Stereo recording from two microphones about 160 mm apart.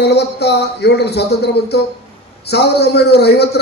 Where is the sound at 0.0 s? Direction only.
90° left.